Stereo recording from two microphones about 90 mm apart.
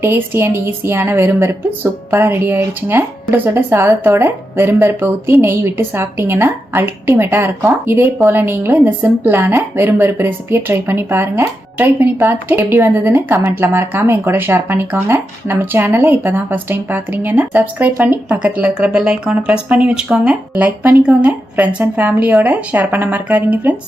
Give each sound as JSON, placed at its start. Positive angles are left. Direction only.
{"t": 0.0, "sound": "a woman's voice", "side_deg": -25}